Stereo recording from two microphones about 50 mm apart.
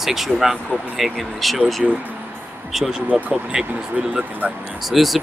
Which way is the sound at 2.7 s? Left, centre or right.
Centre.